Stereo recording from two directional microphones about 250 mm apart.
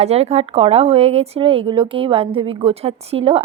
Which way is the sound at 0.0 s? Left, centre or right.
Right.